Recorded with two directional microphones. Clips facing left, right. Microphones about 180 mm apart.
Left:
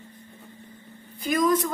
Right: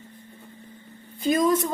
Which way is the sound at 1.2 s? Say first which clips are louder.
Right 1 dB; 25° right (ahead or behind).